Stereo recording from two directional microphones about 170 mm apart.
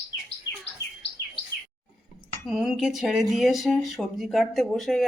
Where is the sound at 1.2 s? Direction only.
15° left (ahead or behind).